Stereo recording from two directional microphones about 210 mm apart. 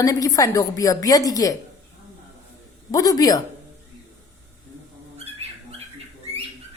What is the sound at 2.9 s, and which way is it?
Speech, 15° left (ahead or behind).